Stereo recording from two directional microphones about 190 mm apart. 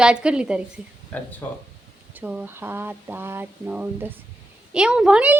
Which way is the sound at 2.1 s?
5° right (ahead or behind).